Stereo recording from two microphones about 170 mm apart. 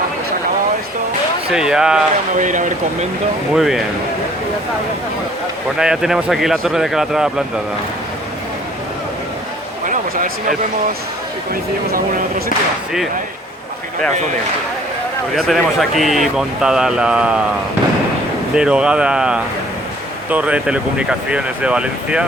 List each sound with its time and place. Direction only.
1.5 s speech: 5° right (ahead or behind)
2.4 s speech: 45° right (ahead or behind)
3.5 s speech: centre (ahead or behind)
5.8 s speech: 5° right (ahead or behind)
11.9 s speech: 55° right (ahead or behind)
15.4 s speech: centre (ahead or behind)
18.5 s speech: 5° right (ahead or behind)